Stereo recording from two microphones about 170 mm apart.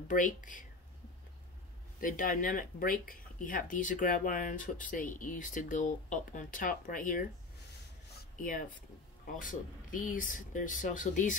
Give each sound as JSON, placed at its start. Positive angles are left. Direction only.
{"t": 0.1, "sound": "speech", "side_deg": 50}
{"t": 2.0, "sound": "speech", "side_deg": 55}
{"t": 8.4, "sound": "speech", "side_deg": 55}